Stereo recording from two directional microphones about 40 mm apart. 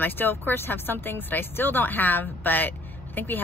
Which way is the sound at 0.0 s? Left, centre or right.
Left.